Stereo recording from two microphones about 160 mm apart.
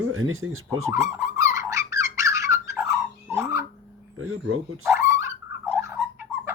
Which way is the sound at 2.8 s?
5° right (ahead or behind).